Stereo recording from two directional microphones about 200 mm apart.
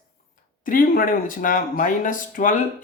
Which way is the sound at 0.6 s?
45° left (ahead or behind).